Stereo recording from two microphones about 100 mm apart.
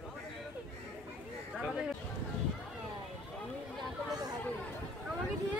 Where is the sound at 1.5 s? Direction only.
5° right (ahead or behind).